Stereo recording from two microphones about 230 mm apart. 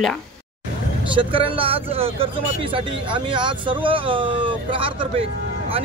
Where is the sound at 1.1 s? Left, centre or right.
Right.